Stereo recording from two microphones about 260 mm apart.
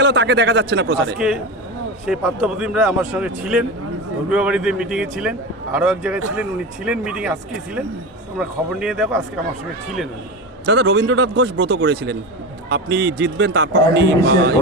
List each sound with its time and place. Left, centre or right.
0.0 s a man's voice: right
2.0 s a man's voice: centre
10.7 s a man's voice: right